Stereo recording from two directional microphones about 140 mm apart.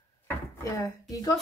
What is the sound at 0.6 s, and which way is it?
Speech, 25° left (ahead or behind).